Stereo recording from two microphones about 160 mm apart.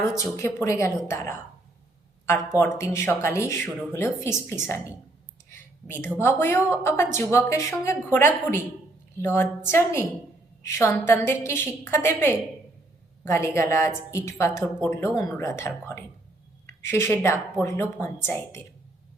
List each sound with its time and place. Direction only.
0.2 s speech: 15° left (ahead or behind)
5.5 s a sound: 15° left (ahead or behind)
6.1 s a woman's voice: 15° left (ahead or behind)